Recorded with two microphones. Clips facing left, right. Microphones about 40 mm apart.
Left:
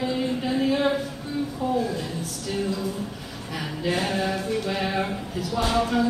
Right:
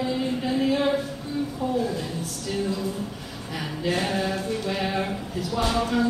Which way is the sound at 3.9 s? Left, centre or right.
Centre.